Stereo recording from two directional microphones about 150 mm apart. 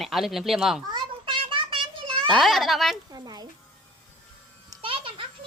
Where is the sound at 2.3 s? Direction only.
Centre (ahead or behind).